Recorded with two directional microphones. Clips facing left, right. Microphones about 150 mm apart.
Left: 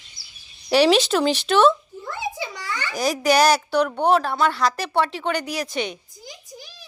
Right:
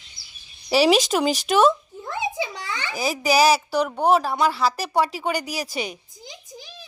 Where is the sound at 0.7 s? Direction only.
5° right (ahead or behind).